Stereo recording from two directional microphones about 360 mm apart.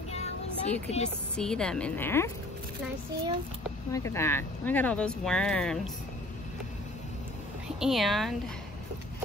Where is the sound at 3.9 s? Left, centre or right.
Centre.